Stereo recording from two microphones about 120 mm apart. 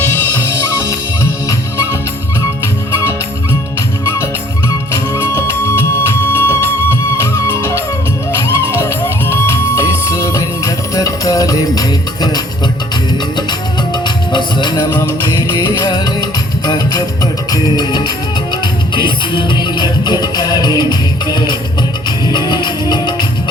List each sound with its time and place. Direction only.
0.1 s music: 15° left (ahead or behind)
3.8 s music: 25° left (ahead or behind); by 14.7 s 40° left (ahead or behind)
15.9 s music: 35° left (ahead or behind)